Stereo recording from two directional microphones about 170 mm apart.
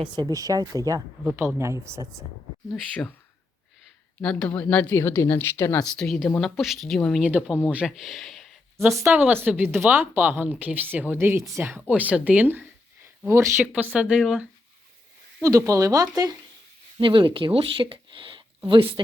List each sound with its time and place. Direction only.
0.0 s speech: 25° right (ahead or behind)
1.2 s speech: 5° right (ahead or behind)
1.5 s speech: 15° right (ahead or behind)
4.2 s speech: 5° left (ahead or behind)
5.9 s speech: centre (ahead or behind)
9.0 s speech: 10° right (ahead or behind)
13.9 s speech: 5° right (ahead or behind)
15.4 s speech: 20° right (ahead or behind)